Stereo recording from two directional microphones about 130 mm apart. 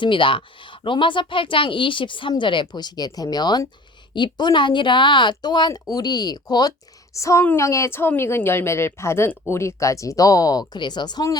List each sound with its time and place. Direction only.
0.0 s a woman's voice: 40° left (ahead or behind)